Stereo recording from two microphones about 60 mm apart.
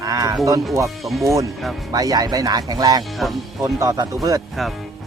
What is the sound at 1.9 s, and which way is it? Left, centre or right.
Speech, right.